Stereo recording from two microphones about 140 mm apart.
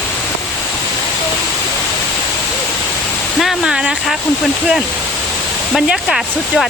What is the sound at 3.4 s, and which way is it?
Speech, 5° right (ahead or behind).